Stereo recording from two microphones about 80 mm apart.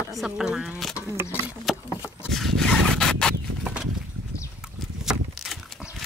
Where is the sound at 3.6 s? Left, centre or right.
Centre.